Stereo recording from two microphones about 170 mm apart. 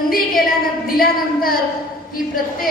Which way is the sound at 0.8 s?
60° left (ahead or behind).